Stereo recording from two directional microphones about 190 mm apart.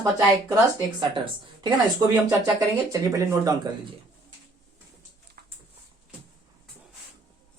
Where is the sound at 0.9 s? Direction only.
25° right (ahead or behind).